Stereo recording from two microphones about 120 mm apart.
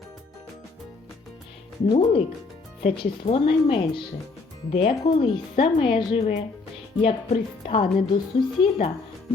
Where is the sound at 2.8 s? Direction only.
55° left (ahead or behind).